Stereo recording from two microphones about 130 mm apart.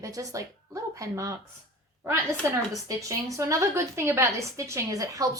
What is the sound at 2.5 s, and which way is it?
A woman's voice, 25° right (ahead or behind).